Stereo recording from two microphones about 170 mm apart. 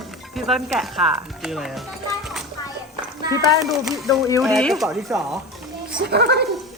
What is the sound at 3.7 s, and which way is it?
Speech, centre (ahead or behind).